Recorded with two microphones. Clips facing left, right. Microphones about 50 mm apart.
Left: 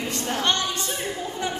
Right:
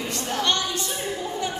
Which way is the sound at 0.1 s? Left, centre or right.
Left.